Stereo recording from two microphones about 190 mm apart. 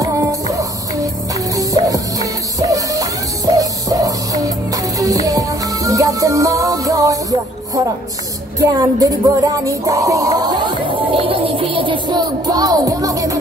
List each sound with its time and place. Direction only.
0.0 s music: 15° right (ahead or behind)